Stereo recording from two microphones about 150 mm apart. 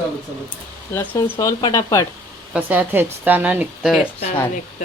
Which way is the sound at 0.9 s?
15° left (ahead or behind).